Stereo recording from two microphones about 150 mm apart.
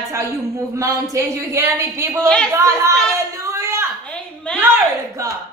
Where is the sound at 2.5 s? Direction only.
20° right (ahead or behind).